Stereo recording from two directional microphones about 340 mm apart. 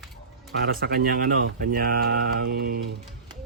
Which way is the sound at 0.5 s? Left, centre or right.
Right.